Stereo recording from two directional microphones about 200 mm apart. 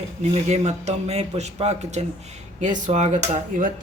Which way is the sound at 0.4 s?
35° right (ahead or behind).